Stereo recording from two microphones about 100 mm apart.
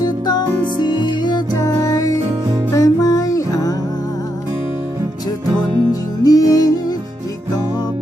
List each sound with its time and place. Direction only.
0.0 s music: 45° left (ahead or behind)
1.5 s music: 35° left (ahead or behind)
5.9 s music: 35° left (ahead or behind)